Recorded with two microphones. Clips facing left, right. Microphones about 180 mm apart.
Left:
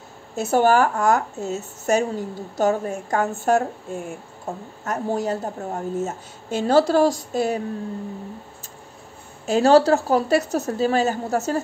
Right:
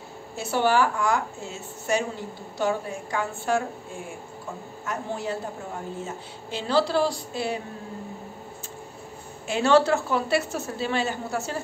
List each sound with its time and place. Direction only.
0.4 s a woman's voice: 45° left (ahead or behind)
4.8 s a woman's voice: 40° left (ahead or behind)
9.5 s a woman's voice: 40° left (ahead or behind)